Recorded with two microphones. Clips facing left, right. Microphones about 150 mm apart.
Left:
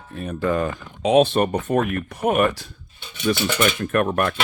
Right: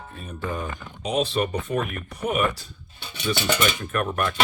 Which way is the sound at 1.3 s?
55° left (ahead or behind).